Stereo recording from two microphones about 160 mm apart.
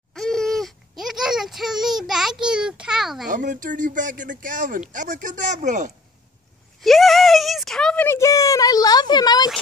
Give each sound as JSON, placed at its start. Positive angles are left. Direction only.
{"t": 0.1, "sound": "a sound", "side_deg": 5}
{"t": 3.3, "sound": "speech", "side_deg": -55}
{"t": 6.8, "sound": "speech", "side_deg": 0}